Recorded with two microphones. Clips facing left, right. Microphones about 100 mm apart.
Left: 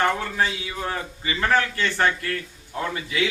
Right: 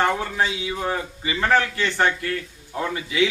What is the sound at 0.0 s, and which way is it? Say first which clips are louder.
A man's voice: right 1 dB; 15° right (ahead or behind).